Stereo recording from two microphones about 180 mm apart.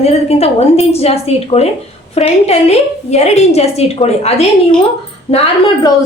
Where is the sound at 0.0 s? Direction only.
35° left (ahead or behind).